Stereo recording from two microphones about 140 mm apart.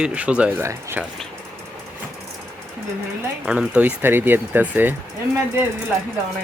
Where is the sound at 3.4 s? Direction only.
5° right (ahead or behind).